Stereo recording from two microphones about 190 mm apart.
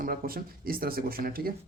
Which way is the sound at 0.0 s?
50° right (ahead or behind).